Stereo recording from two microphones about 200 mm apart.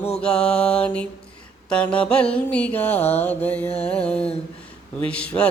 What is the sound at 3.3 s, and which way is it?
Mantra, 5° left (ahead or behind).